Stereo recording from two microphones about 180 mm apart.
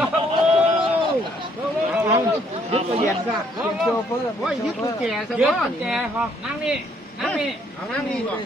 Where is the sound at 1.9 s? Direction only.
10° right (ahead or behind).